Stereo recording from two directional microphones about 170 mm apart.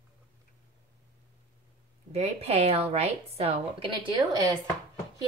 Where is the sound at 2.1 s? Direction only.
35° right (ahead or behind).